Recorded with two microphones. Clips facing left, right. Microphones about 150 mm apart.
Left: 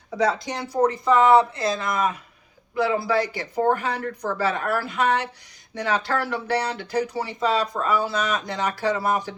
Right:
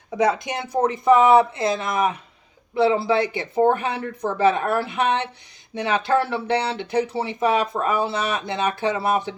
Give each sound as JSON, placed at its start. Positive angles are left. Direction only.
{"t": 0.1, "sound": "speech", "side_deg": -20}